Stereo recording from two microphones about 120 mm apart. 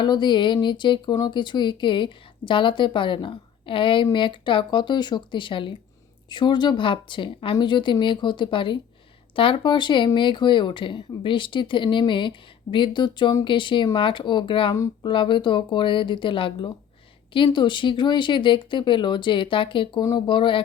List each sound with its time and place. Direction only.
0.0 s a woman's voice: 40° left (ahead or behind)